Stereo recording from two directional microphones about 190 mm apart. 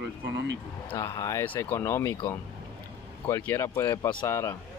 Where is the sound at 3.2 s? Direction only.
15° left (ahead or behind).